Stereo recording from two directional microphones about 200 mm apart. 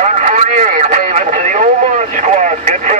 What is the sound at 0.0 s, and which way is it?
Radio, 35° right (ahead or behind).